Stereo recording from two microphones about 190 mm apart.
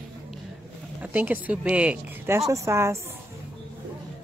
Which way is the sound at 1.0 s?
10° right (ahead or behind).